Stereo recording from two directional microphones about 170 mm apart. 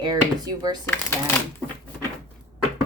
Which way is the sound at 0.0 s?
25° right (ahead or behind).